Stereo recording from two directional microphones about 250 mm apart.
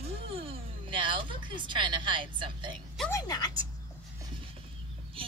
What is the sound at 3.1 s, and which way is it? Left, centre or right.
Speech, centre.